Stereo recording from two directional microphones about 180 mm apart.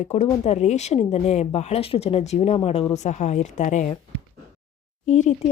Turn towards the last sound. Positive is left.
turn(degrees=40)  # may be behind; listen again after turning